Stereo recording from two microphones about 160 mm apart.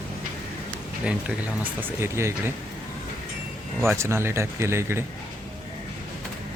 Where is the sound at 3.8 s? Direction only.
15° right (ahead or behind).